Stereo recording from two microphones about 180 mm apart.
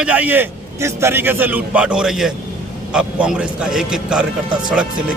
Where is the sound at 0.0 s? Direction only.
10° right (ahead or behind).